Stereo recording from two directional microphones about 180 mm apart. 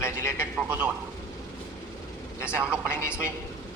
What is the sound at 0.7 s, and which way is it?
Speech, 5° right (ahead or behind).